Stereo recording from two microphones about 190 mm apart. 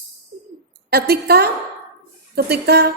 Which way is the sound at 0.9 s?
55° right (ahead or behind).